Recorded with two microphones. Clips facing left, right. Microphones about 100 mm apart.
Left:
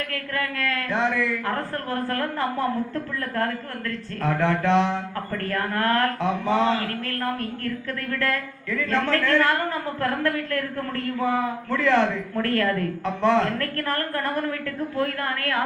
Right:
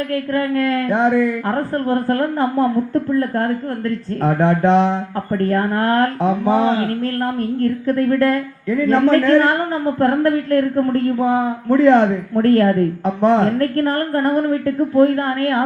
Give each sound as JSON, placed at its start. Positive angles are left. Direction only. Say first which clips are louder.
{"t": 0.1, "sound": "a woman's voice", "louder": "right 10 dB", "side_deg": -30}